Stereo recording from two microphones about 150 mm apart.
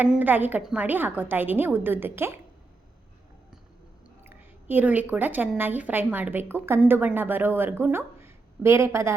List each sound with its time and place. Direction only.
0.0 s a woman's voice: 10° right (ahead or behind)
4.2 s a woman's voice: 15° right (ahead or behind)